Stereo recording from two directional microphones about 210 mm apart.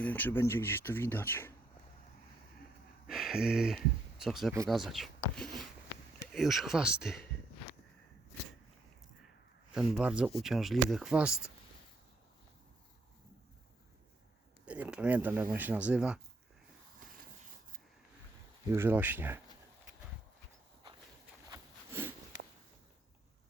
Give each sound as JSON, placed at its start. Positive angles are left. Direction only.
{"t": 0.0, "sound": "speech", "side_deg": 10}
{"t": 3.1, "sound": "speech", "side_deg": 0}
{"t": 9.7, "sound": "speech", "side_deg": -5}
{"t": 14.6, "sound": "speech", "side_deg": -5}
{"t": 17.0, "sound": "a sound", "side_deg": -40}
{"t": 18.7, "sound": "speech", "side_deg": -10}
{"t": 21.5, "sound": "a sound", "side_deg": -10}